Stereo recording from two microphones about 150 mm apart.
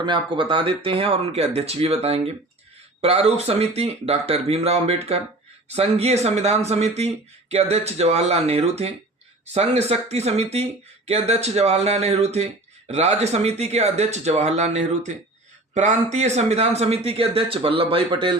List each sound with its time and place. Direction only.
0.0 s speech: 30° right (ahead or behind)